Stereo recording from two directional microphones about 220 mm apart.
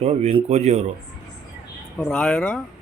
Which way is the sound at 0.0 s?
30° right (ahead or behind).